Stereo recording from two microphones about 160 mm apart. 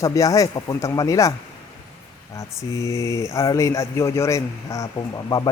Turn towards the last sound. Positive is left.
turn(degrees=25)  # may be behind; listen again after turning